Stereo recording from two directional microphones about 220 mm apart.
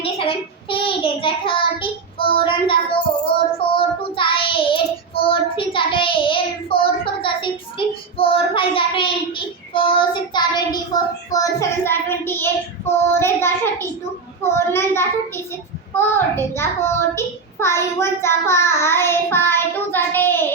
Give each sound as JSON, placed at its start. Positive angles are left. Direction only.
{"t": 0.0, "sound": "child singing", "side_deg": 25}
{"t": 16.0, "sound": "a child's voice", "side_deg": 10}